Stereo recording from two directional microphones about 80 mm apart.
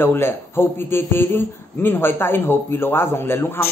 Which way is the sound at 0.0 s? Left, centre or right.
Left.